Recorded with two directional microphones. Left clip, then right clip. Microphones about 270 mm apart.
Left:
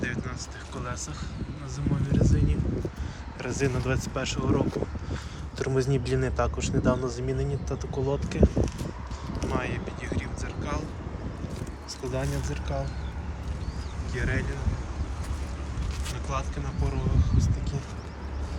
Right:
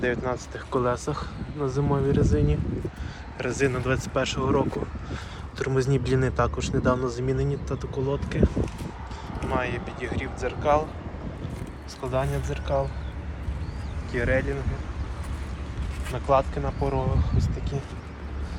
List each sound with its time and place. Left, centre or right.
0.0 s speech: centre
3.3 s speech: centre
14.1 s speech: centre
16.3 s speech: centre